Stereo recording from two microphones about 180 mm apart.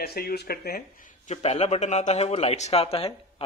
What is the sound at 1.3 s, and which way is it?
Speech, 35° left (ahead or behind).